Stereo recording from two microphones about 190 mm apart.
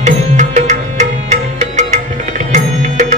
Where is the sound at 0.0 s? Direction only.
40° right (ahead or behind).